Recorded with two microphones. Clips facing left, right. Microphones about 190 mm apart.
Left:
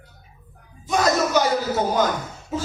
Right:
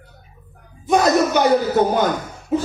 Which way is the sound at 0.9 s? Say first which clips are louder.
Right 4 dB; 60° right (ahead or behind).